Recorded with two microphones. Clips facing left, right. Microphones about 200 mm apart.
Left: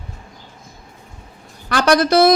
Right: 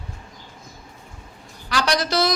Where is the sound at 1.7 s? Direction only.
55° left (ahead or behind).